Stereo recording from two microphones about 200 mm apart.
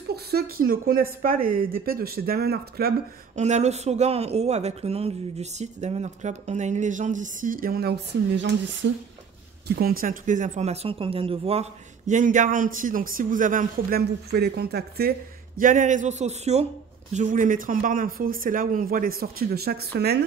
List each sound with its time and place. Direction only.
0.1 s speech: 50° right (ahead or behind)
3.3 s speech: 35° right (ahead or behind)
8.4 s speech: 65° right (ahead or behind)
9.7 s speech: 50° right (ahead or behind)